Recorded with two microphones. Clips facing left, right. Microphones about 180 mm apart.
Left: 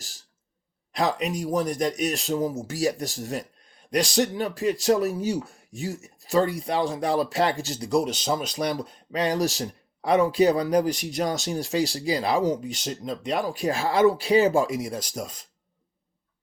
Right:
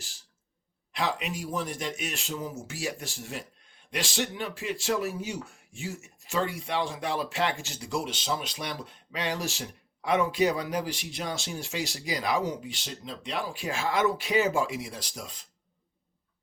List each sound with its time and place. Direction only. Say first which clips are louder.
0.9 s speech: left 6 dB; 40° left (ahead or behind)